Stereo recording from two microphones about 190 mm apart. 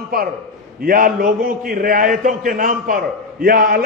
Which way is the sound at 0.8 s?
50° right (ahead or behind).